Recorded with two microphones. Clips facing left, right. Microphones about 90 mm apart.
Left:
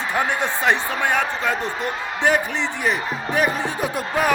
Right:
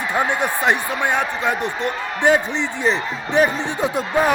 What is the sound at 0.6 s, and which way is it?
Speech, 20° right (ahead or behind).